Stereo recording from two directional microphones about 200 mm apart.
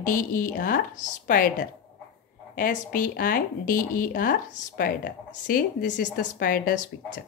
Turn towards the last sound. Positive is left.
turn(degrees=40)  # may be behind; listen again after turning